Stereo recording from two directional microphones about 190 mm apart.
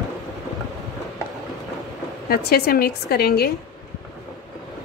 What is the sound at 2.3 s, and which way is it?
A woman's voice, 55° left (ahead or behind).